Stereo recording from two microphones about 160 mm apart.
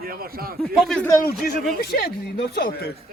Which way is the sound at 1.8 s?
75° left (ahead or behind).